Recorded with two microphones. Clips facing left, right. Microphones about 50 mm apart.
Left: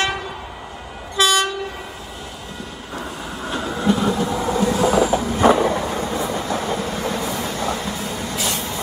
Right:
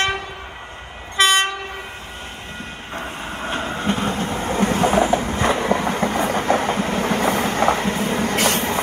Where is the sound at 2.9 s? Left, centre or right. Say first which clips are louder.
Right 1 dB; right.